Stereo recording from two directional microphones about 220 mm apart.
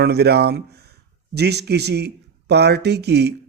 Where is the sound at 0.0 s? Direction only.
45° right (ahead or behind).